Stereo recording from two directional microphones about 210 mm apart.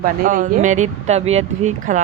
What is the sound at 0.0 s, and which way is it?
Speech, 40° right (ahead or behind).